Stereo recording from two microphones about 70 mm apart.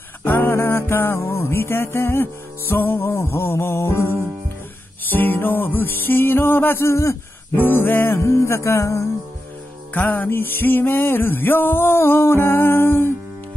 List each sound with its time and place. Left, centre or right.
0.2 s music: left
5.1 s music: left
7.5 s music: left
9.9 s music: left